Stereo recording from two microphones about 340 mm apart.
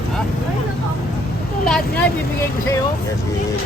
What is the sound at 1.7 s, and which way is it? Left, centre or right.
Vehicle, centre.